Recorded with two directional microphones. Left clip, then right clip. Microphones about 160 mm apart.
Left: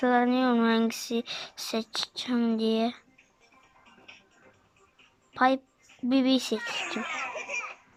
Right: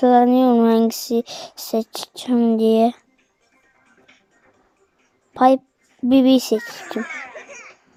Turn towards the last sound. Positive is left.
turn(degrees=-40)  # may be behind; listen again after turning